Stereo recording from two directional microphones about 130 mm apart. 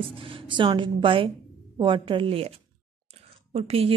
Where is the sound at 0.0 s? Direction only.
45° right (ahead or behind).